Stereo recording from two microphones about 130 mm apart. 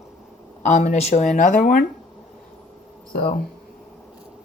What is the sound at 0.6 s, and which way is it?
Speech, 65° left (ahead or behind).